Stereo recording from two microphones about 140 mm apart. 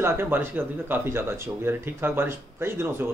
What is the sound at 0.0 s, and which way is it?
A man's voice, 15° right (ahead or behind).